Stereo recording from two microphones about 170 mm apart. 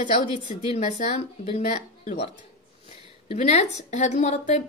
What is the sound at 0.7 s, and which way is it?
Speech, 35° left (ahead or behind).